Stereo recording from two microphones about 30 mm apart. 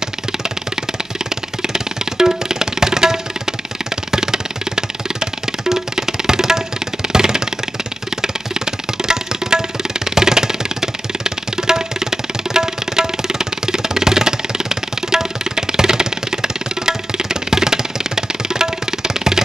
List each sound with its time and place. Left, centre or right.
1.6 s music: centre